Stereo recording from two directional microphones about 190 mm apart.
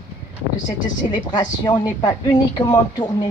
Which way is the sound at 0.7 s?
20° left (ahead or behind).